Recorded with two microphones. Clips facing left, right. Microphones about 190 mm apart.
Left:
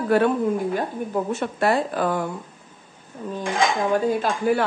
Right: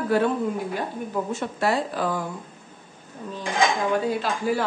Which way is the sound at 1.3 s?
60° left (ahead or behind).